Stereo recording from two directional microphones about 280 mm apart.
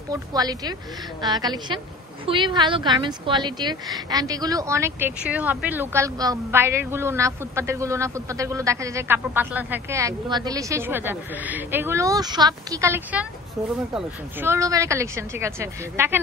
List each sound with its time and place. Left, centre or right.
0.1 s speech: centre